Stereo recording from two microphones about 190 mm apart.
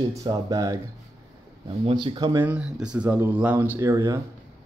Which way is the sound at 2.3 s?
10° right (ahead or behind).